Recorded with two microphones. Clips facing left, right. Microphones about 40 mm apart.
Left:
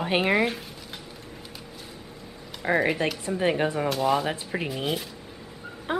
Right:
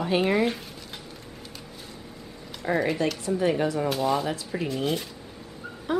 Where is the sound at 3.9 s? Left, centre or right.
Centre.